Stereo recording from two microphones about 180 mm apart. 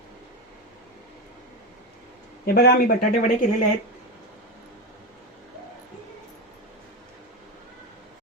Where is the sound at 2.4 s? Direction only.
55° left (ahead or behind).